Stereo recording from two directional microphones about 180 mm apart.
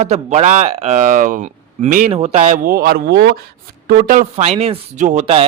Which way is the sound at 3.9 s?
50° right (ahead or behind).